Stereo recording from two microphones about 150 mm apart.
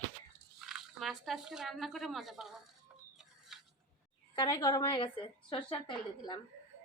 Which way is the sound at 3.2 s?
Centre (ahead or behind).